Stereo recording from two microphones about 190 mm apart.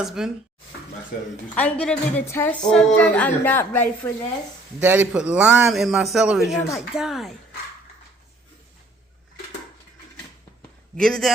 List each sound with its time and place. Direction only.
0.0 s a man's voice: centre (ahead or behind)
1.1 s speech: 55° left (ahead or behind)
1.5 s a woman's voice: 5° left (ahead or behind)
4.8 s a man's voice: 10° right (ahead or behind)
10.9 s a man's voice: 5° left (ahead or behind)